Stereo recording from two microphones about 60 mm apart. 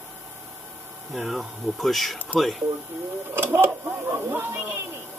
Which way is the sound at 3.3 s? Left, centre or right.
Right.